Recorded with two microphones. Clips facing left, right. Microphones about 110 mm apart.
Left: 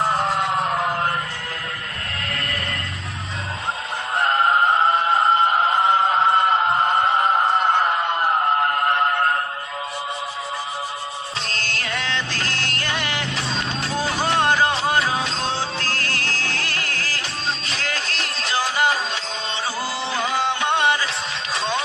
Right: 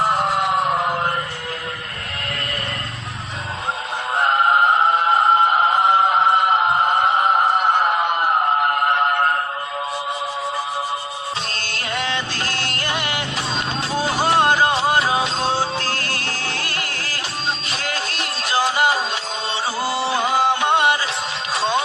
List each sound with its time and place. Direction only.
12.9 s music: 15° right (ahead or behind)
18.4 s music: 15° right (ahead or behind)
19.8 s music: 50° right (ahead or behind)
20.1 s music: 10° right (ahead or behind)
20.3 s music: 45° right (ahead or behind)
20.6 s music: 10° right (ahead or behind)